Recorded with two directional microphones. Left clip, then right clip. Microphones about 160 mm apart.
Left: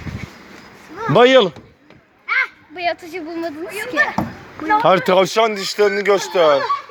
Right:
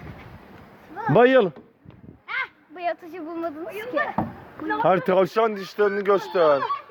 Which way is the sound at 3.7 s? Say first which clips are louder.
Left 9 dB; 55° left (ahead or behind).